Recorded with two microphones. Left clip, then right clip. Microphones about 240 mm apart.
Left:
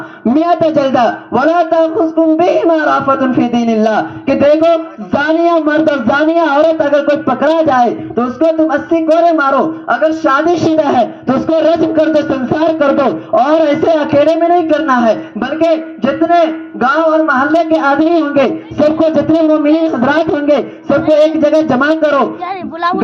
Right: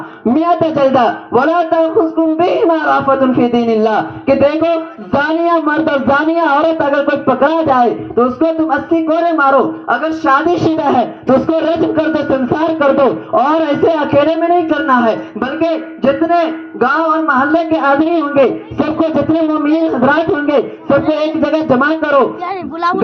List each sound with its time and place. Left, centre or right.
0.3 s a man's voice: left